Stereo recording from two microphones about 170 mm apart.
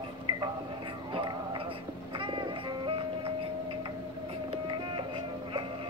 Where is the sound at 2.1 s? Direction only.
30° right (ahead or behind).